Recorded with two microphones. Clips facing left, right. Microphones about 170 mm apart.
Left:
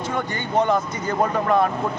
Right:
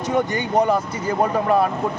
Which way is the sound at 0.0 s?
20° right (ahead or behind).